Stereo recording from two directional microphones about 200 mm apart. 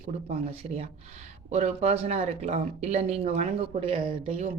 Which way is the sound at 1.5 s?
35° right (ahead or behind).